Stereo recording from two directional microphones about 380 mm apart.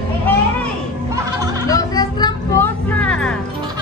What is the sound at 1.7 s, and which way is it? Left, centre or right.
Vehicle, centre.